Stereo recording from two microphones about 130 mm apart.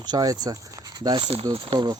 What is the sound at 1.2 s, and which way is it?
Speech, 50° right (ahead or behind).